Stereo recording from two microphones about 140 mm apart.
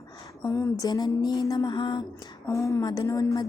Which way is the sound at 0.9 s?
30° left (ahead or behind).